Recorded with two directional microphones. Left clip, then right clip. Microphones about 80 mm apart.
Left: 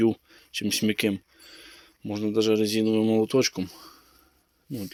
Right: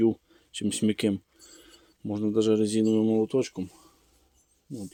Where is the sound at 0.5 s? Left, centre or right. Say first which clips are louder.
Left 3 dB; right.